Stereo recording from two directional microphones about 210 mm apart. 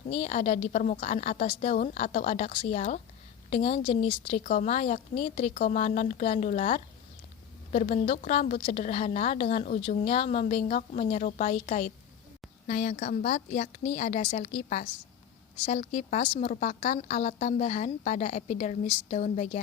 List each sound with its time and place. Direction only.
0.1 s a woman's voice: 30° left (ahead or behind)